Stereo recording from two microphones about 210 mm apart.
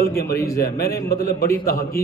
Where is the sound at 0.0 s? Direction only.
45° left (ahead or behind).